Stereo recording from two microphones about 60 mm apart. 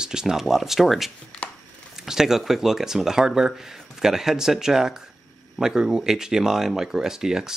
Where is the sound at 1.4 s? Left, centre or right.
Left.